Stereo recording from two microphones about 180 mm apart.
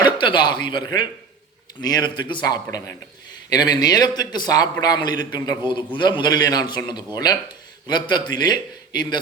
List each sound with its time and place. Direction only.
0.0 s a man's voice: 25° left (ahead or behind)